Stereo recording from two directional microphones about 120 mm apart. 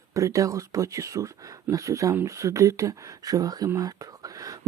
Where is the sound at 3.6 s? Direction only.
30° right (ahead or behind).